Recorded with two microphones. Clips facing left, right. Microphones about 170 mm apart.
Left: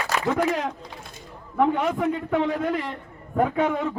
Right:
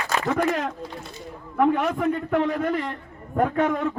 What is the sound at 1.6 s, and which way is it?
A man's voice, 5° left (ahead or behind).